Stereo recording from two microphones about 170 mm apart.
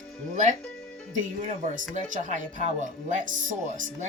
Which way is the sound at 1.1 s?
45° right (ahead or behind).